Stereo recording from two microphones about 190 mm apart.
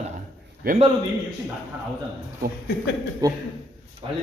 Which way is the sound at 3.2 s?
20° right (ahead or behind).